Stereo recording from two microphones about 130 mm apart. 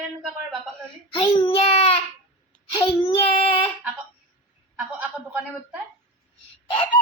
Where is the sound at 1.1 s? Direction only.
45° left (ahead or behind).